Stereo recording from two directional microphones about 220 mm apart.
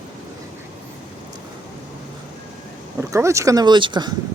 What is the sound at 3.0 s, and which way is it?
Speech, 15° right (ahead or behind).